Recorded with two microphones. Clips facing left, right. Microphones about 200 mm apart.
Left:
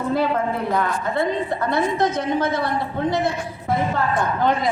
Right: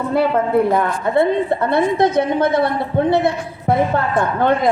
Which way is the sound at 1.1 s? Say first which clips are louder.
Right 9 dB; 60° right (ahead or behind).